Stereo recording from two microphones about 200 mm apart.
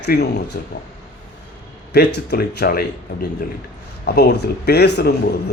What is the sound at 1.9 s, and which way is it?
Speech, 55° left (ahead or behind).